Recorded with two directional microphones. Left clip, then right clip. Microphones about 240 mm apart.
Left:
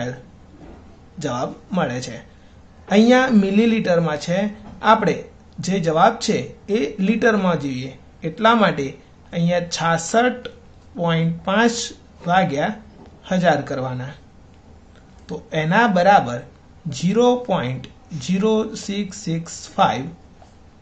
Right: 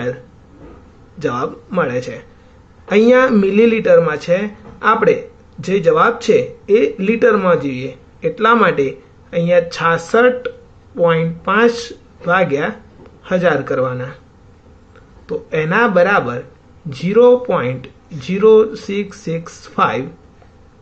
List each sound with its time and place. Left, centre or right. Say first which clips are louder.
1.2 s a man's voice: right 5 dB; centre
15.2 s a man's voice: right 6 dB; centre